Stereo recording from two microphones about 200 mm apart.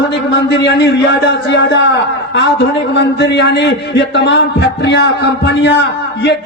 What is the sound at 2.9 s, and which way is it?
A man's voice, 60° left (ahead or behind).